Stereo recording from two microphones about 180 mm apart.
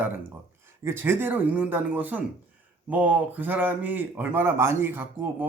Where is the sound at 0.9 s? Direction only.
10° right (ahead or behind).